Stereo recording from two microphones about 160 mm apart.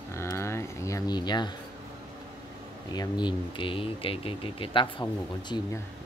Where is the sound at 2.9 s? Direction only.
25° left (ahead or behind).